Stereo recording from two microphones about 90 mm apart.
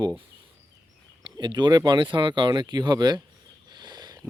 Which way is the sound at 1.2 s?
60° right (ahead or behind).